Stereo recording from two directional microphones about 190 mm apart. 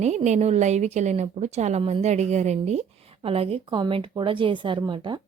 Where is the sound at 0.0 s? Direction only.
35° right (ahead or behind).